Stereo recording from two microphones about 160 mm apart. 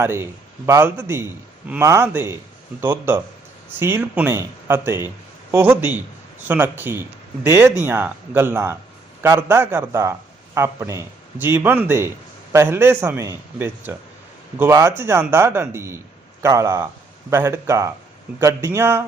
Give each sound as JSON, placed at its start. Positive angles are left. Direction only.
{"t": 0.0, "sound": "a man's voice", "side_deg": -15}